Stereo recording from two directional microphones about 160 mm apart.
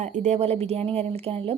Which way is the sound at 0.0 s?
50° right (ahead or behind).